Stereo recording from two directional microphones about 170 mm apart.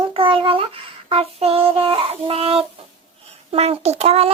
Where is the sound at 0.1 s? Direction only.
30° right (ahead or behind).